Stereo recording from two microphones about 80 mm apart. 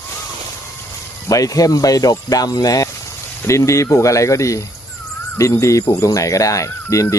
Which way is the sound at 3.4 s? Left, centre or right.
Left.